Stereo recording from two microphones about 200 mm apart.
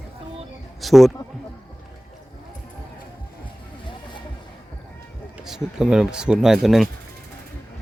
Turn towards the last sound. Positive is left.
turn(degrees=0)  # may be behind; listen again after turning